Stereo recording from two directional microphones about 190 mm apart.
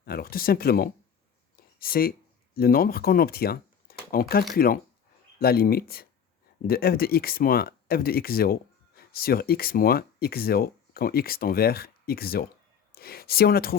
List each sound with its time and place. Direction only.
0.0 s speech: 55° left (ahead or behind)
1.5 s a sound: 50° left (ahead or behind)
2.6 s speech: 50° left (ahead or behind)